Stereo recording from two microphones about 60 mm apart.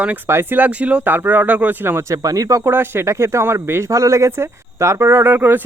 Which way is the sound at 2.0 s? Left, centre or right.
Right.